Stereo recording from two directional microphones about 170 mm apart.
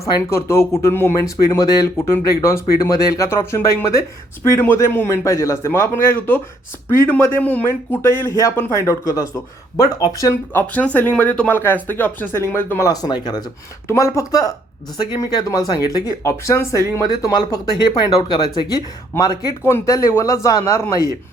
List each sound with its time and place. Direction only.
0.0 s speech: 15° left (ahead or behind)